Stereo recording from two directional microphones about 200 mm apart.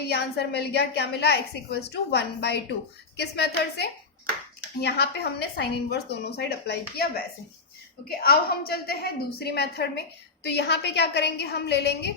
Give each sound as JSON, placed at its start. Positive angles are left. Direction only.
{"t": 0.1, "sound": "a woman's voice", "side_deg": 55}